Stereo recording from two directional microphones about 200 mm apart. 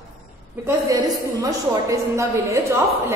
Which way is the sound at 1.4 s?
15° right (ahead or behind).